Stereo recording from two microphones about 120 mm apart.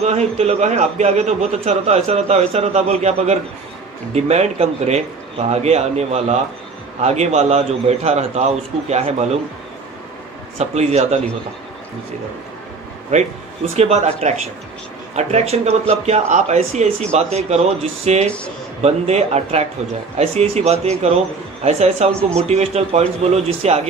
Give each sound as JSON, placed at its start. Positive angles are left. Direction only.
{"t": 0.0, "sound": "a man's voice", "side_deg": -65}
{"t": 10.6, "sound": "a man's voice", "side_deg": -65}
{"t": 13.1, "sound": "speech", "side_deg": -80}
{"t": 13.7, "sound": "speech", "side_deg": -65}